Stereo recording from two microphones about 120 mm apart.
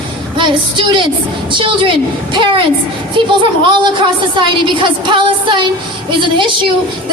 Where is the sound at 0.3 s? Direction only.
40° right (ahead or behind).